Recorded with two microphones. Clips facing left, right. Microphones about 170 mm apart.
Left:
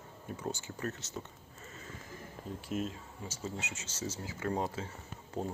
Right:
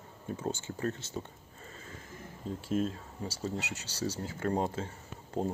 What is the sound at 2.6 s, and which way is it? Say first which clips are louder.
Speech: right 5 dB; 30° right (ahead or behind).